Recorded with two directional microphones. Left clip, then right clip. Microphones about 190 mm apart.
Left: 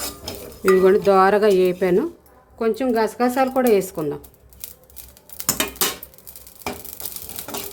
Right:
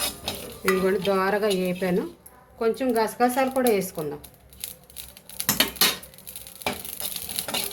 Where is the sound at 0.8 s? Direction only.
50° left (ahead or behind).